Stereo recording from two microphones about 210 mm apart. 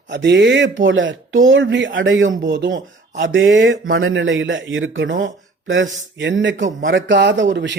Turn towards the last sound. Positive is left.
turn(degrees=-60)  # may be behind; listen again after turning